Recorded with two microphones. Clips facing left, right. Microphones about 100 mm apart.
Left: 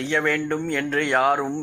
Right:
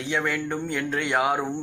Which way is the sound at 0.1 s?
10° right (ahead or behind).